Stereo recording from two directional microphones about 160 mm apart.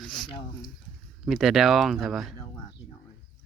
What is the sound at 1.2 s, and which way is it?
Speech, centre (ahead or behind).